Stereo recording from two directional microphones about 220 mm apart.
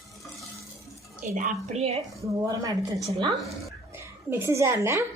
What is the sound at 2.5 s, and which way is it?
Speech, 15° right (ahead or behind).